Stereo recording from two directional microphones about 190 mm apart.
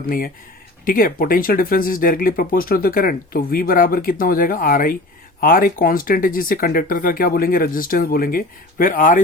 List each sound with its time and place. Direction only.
0.9 s speech: 50° left (ahead or behind)